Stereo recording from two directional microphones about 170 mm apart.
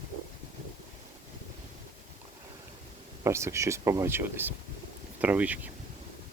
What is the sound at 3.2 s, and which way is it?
Speech, 15° right (ahead or behind).